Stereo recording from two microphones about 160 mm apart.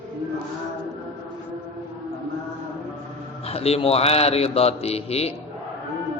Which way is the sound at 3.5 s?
40° left (ahead or behind).